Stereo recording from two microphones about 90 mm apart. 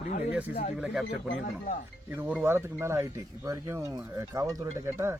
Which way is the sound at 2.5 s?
30° right (ahead or behind).